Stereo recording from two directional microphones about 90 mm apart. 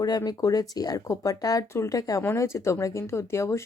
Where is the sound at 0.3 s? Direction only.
40° left (ahead or behind).